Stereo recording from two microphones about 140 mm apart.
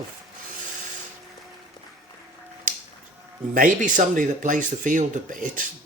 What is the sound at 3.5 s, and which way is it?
Speech, 70° right (ahead or behind).